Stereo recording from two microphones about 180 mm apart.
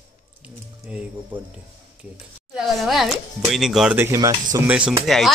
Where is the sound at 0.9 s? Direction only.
5° right (ahead or behind).